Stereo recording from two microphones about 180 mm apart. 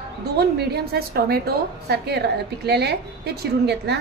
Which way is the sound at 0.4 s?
65° right (ahead or behind).